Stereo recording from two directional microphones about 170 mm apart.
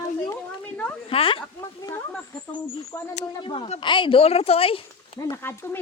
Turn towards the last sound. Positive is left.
turn(degrees=15)  # may be behind; listen again after turning